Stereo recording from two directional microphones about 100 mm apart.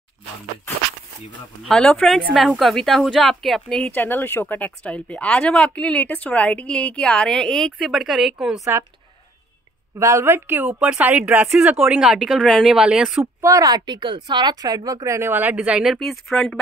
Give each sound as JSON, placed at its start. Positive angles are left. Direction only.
{"t": 1.6, "sound": "speech", "side_deg": 5}
{"t": 9.9, "sound": "speech", "side_deg": -30}
{"t": 13.2, "sound": "speech", "side_deg": -30}
{"t": 15.5, "sound": "speech", "side_deg": -10}